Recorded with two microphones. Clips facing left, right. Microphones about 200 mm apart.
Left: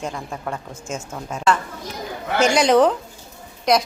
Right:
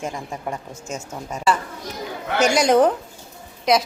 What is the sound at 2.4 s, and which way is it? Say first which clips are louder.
Speech: left 1 dB; 40° right (ahead or behind).